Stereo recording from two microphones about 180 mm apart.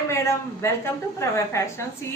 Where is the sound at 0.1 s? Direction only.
15° left (ahead or behind).